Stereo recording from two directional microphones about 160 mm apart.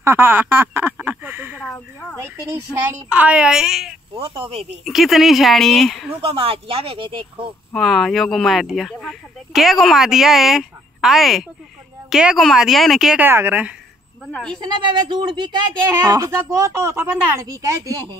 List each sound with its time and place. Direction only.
0.0 s speech: 15° right (ahead or behind)
1.7 s speech: 10° left (ahead or behind)
2.1 s speech: 15° right (ahead or behind)
4.1 s speech: 35° right (ahead or behind)
4.8 s speech: centre (ahead or behind)
6.2 s speech: 35° right (ahead or behind)
7.7 s speech: centre (ahead or behind)
13.3 s speech: 15° right (ahead or behind)
14.2 s speech: 5° left (ahead or behind)
14.6 s speech: 30° right (ahead or behind)